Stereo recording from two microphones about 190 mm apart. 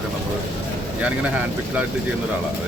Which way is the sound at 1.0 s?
5° right (ahead or behind).